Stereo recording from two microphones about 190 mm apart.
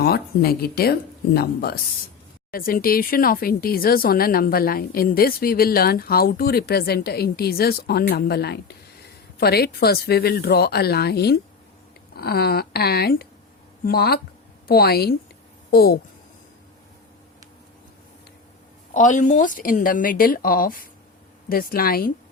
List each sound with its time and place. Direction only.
0.0 s a woman's voice: 55° left (ahead or behind)
18.9 s speech: 40° left (ahead or behind)